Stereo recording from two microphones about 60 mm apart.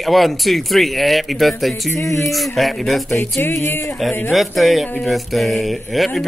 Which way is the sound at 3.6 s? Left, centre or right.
Left.